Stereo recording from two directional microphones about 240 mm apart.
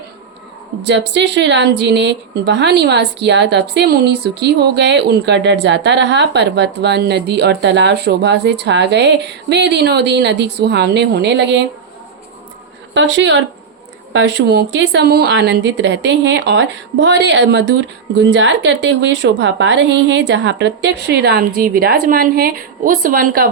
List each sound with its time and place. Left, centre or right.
0.8 s speech: right
12.9 s speech: right